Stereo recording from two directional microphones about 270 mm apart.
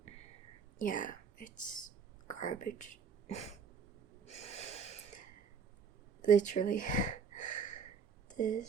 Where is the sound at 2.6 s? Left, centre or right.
Left.